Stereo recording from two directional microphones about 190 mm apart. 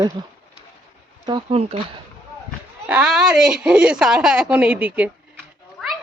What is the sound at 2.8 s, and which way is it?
Speech, 5° right (ahead or behind).